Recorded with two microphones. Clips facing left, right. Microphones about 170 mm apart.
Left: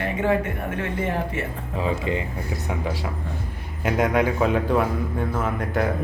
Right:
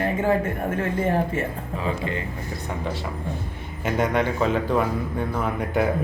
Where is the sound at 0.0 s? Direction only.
35° right (ahead or behind).